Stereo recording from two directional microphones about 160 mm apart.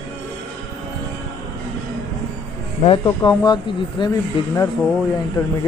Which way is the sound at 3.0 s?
25° left (ahead or behind).